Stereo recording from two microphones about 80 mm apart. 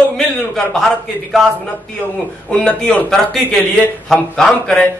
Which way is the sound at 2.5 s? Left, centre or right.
Centre.